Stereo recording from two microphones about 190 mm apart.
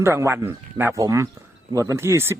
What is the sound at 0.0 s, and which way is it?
Speech, 15° right (ahead or behind).